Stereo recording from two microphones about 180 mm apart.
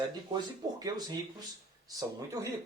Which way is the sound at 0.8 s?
20° right (ahead or behind).